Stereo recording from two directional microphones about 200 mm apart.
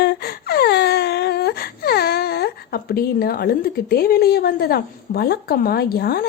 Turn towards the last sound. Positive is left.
turn(degrees=50)  # may be behind; listen again after turning